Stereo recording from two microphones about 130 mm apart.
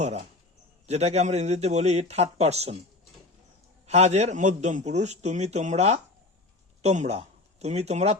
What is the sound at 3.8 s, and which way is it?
A man's voice, 60° right (ahead or behind).